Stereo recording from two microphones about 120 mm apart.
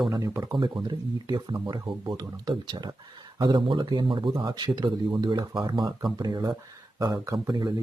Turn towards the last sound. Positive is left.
turn(degrees=-35)  # may be behind; listen again after turning